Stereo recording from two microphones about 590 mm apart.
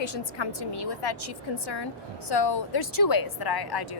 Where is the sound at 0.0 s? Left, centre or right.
Left.